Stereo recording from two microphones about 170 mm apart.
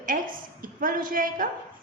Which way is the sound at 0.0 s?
55° right (ahead or behind).